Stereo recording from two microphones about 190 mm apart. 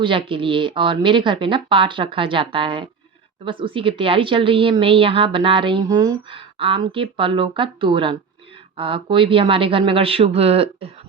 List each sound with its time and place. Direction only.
0.0 s a woman's voice: 25° right (ahead or behind)